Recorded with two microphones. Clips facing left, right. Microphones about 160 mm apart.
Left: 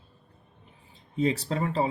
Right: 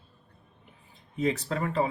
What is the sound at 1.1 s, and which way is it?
Speech, 30° left (ahead or behind).